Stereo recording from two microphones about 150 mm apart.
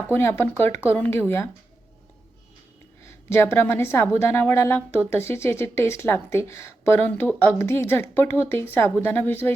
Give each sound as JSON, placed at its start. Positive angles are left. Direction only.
{"t": 0.1, "sound": "a woman's voice", "side_deg": 15}
{"t": 3.0, "sound": "a woman's voice", "side_deg": 15}